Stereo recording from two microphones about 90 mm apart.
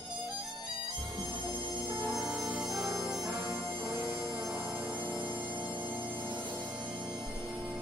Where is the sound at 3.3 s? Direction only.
45° right (ahead or behind).